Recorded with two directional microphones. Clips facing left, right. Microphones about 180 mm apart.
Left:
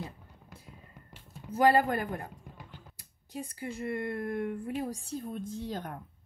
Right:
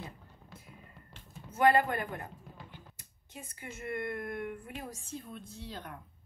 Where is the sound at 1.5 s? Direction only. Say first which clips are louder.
Left 2 dB; 35° left (ahead or behind).